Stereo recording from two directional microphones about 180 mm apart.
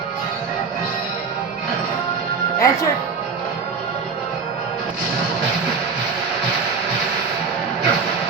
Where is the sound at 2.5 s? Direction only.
15° left (ahead or behind).